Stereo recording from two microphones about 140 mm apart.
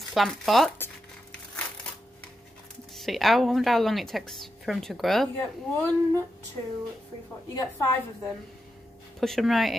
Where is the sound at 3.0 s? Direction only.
Centre (ahead or behind).